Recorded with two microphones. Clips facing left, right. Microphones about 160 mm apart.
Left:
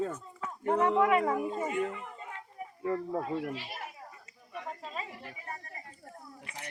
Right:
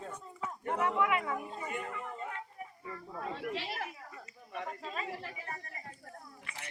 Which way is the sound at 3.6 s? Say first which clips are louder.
Right 3 dB; 80° right.